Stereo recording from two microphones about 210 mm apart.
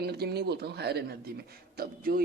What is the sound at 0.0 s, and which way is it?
Speech, 50° right (ahead or behind).